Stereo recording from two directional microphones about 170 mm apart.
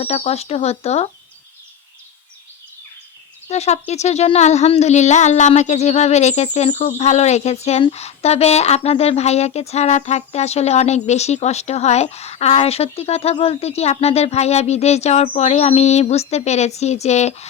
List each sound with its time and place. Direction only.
0.0 s speech: 40° left (ahead or behind)
3.5 s speech: 40° left (ahead or behind)